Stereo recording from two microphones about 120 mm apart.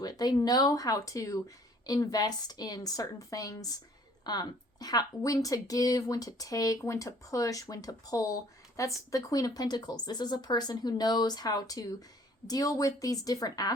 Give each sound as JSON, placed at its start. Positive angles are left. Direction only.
{"t": 0.0, "sound": "speech", "side_deg": 35}